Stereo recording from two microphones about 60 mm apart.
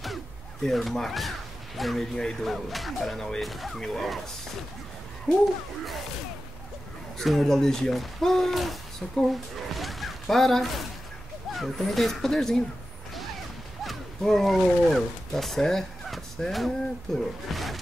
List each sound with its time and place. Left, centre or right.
0.7 s speech: centre
7.2 s speech: centre
9.8 s a sound: centre
11.5 s speech: centre
13.8 s speech: centre